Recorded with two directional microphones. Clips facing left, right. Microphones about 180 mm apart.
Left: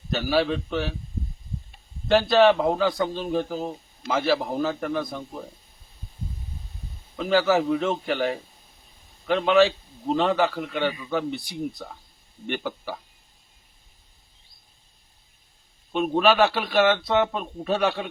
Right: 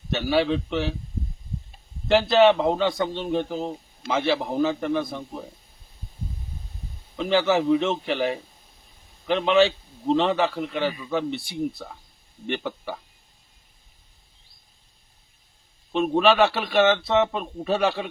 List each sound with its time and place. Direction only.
0.1 s a man's voice: centre (ahead or behind)
2.0 s a man's voice: centre (ahead or behind)
3.5 s speech: 20° right (ahead or behind)
4.0 s a man's voice: centre (ahead or behind)
7.2 s a man's voice: centre (ahead or behind)
15.9 s a man's voice: centre (ahead or behind)